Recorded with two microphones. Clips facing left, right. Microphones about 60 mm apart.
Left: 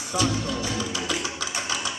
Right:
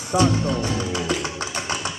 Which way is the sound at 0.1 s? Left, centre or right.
Right.